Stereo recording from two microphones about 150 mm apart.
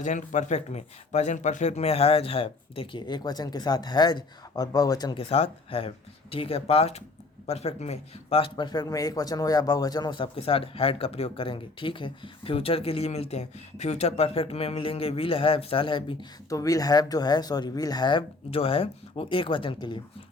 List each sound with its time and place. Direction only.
0.0 s speech: 55° left (ahead or behind); by 5.2 s 25° left (ahead or behind)
5.3 s speech: 40° left (ahead or behind)
16.5 s speech: 20° left (ahead or behind)